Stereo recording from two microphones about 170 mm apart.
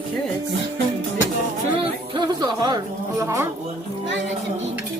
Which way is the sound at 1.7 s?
30° right (ahead or behind).